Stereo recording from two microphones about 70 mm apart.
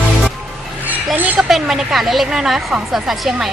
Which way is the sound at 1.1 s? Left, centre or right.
Right.